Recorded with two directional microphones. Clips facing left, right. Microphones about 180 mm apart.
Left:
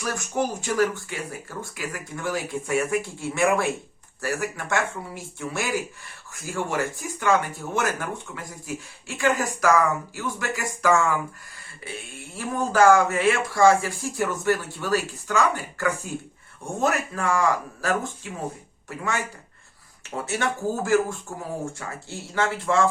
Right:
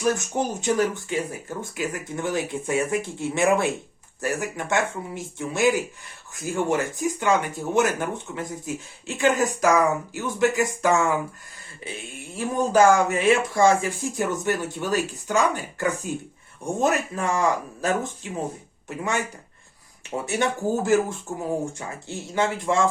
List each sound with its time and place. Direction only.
0.0 s speech: 20° right (ahead or behind)
20.2 s speech: 20° right (ahead or behind)